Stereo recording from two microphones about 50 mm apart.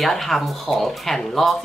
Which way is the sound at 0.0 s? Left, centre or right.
Centre.